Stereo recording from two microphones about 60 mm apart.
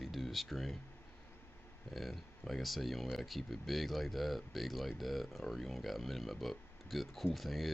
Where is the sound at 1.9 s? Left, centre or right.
Centre.